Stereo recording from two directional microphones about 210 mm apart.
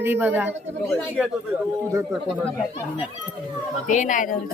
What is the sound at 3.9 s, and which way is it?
Speech, 35° left (ahead or behind).